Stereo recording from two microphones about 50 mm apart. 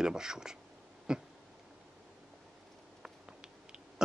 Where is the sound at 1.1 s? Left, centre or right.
Centre.